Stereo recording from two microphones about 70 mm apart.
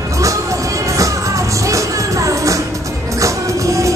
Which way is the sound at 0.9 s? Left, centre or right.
Right.